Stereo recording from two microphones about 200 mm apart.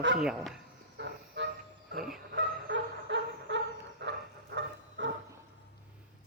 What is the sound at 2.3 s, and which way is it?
Fowl, 65° right (ahead or behind).